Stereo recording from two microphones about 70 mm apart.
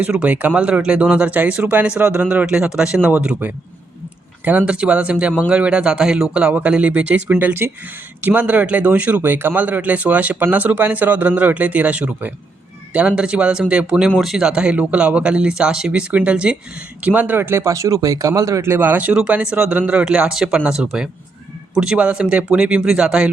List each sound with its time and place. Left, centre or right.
0.0 s a man's voice: centre
17.1 s speech: right
18.6 s a man's voice: right